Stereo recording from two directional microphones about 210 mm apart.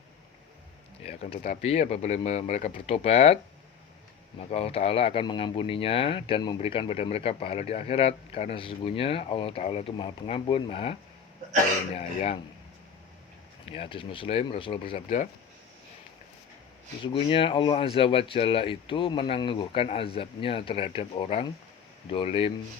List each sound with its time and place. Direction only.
1.0 s speech: 30° left (ahead or behind)
4.4 s speech: 30° left (ahead or behind)
11.9 s speech: 30° left (ahead or behind)
13.7 s speech: 25° left (ahead or behind)
14.9 s speech: 35° left (ahead or behind)
17.0 s speech: 25° left (ahead or behind)